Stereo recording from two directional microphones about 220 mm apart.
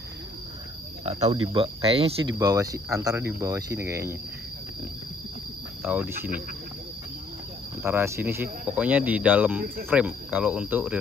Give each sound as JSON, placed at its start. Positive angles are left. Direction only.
{"t": 1.0, "sound": "speech", "side_deg": -30}
{"t": 2.3, "sound": "speech", "side_deg": -15}
{"t": 5.8, "sound": "speech", "side_deg": -10}
{"t": 7.8, "sound": "speech", "side_deg": -10}